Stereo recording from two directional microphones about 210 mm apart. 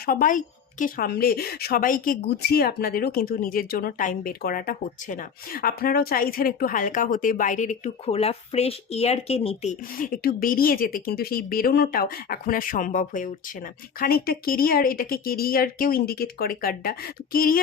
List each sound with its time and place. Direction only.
0.0 s a woman's voice: 40° left (ahead or behind)
10.0 s a woman's voice: 40° left (ahead or behind)